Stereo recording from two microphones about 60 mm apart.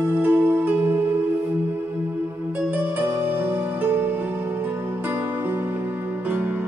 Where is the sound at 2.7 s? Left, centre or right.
Right.